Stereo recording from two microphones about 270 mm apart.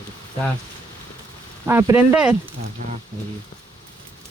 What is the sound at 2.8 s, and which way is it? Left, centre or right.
Speech, right.